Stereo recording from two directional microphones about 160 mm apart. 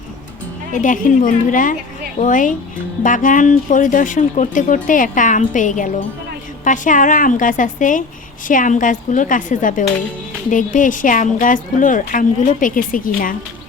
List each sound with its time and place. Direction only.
0.7 s a woman's voice: 55° left (ahead or behind)